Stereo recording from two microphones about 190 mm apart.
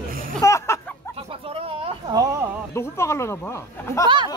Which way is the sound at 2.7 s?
15° left (ahead or behind).